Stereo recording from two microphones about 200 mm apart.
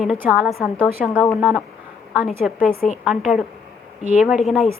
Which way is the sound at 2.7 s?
35° left (ahead or behind).